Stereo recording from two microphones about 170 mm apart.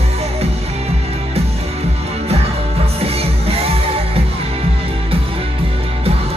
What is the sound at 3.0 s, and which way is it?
Music, 35° right (ahead or behind).